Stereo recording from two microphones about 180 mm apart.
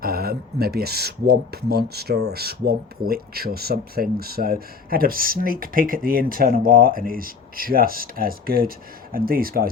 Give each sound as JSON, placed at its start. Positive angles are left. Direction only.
{"t": 0.0, "sound": "speech", "side_deg": -60}